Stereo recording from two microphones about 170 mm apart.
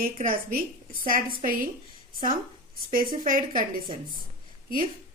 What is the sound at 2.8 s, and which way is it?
A woman's voice, 60° right (ahead or behind).